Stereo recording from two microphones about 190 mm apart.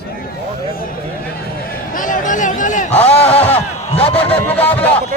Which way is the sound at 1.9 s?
45° left (ahead or behind).